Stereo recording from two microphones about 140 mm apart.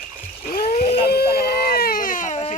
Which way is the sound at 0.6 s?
45° left (ahead or behind).